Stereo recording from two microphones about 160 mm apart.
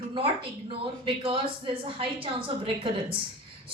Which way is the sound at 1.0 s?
35° right (ahead or behind).